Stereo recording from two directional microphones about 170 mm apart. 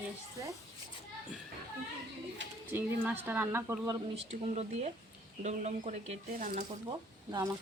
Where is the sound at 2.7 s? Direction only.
10° right (ahead or behind).